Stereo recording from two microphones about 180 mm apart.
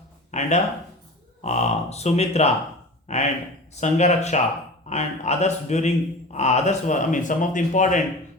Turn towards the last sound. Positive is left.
turn(degrees=45)  # may be behind; listen again after turning